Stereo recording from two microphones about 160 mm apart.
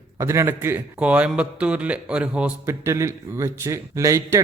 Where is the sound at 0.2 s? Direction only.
15° right (ahead or behind).